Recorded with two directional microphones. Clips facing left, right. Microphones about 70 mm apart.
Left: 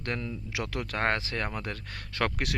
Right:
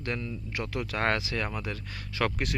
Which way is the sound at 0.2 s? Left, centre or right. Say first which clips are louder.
Even; left.